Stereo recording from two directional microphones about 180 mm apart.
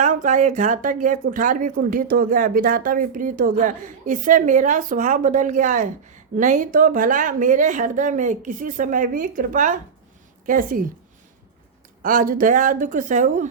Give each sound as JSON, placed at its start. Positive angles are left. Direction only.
{"t": 0.0, "sound": "a woman's voice", "side_deg": -45}
{"t": 12.0, "sound": "a woman's voice", "side_deg": -50}